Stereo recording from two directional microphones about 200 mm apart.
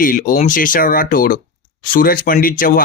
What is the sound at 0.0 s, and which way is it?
Speech, 45° left (ahead or behind).